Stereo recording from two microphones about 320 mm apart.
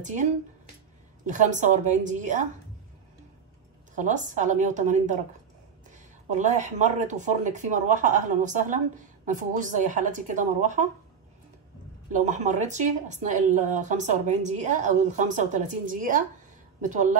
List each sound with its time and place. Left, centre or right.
0.0 s speech: right
3.9 s speech: right
12.1 s speech: right